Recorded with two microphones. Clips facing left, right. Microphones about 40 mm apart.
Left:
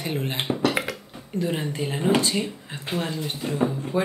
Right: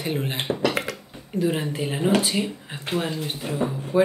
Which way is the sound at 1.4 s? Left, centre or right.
Centre.